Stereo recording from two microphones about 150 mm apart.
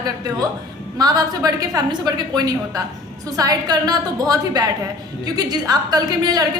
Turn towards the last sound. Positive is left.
turn(degrees=-25)  # may be behind; listen again after turning